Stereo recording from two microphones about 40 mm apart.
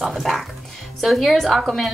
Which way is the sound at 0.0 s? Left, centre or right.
Centre.